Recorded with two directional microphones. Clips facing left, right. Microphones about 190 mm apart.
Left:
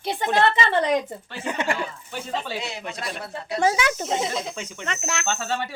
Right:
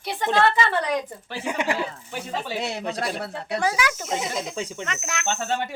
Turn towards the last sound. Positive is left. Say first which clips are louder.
# left 1 dB
turn(degrees=30)  # may be behind; listen again after turning